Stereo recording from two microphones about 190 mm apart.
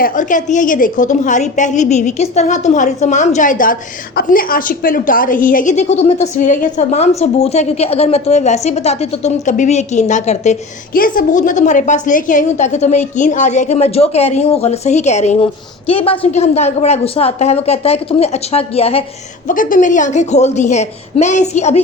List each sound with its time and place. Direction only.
0.0 s a woman's voice: 40° left (ahead or behind)
19.5 s a woman's voice: 45° left (ahead or behind)